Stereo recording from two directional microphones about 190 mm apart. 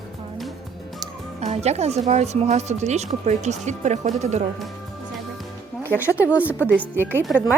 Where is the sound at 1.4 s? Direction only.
35° right (ahead or behind).